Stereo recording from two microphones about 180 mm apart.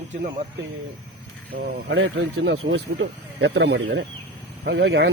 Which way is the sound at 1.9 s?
90° right.